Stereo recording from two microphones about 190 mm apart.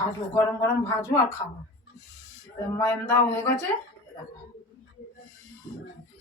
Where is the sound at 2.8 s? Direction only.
15° left (ahead or behind).